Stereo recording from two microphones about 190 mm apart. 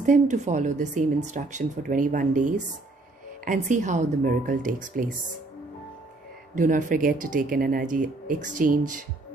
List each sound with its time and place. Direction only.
0.0 s speech: 40° right (ahead or behind)
6.5 s speech: 40° right (ahead or behind)